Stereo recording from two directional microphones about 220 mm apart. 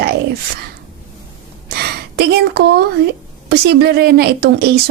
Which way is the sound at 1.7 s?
50° right (ahead or behind).